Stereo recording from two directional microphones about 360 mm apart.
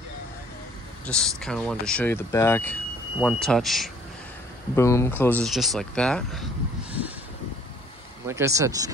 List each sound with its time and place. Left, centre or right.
1.0 s speech: centre
8.3 s speech: centre